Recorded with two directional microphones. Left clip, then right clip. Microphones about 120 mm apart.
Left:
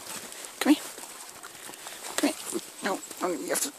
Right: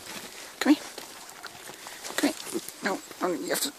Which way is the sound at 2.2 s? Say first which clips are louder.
Even; 15° left (ahead or behind).